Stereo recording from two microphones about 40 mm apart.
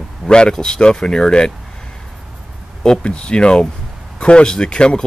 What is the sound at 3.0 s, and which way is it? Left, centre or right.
Speech, left.